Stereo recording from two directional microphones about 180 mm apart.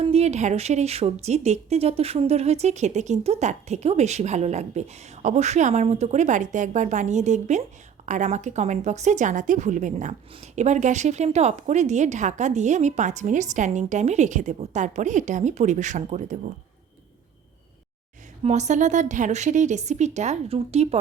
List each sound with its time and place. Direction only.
0.1 s speech: 35° right (ahead or behind)
18.4 s speech: 40° right (ahead or behind)